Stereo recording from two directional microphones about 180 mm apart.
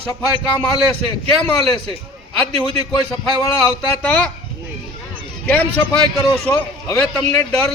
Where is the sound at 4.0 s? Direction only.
5° left (ahead or behind).